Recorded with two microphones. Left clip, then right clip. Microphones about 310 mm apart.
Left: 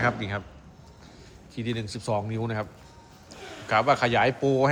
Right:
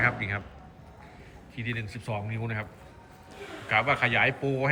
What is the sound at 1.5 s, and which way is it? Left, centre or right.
A man's voice, centre.